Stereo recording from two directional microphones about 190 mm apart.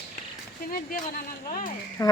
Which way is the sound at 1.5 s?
45° left (ahead or behind).